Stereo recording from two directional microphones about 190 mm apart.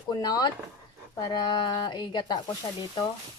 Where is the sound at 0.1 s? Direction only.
20° left (ahead or behind).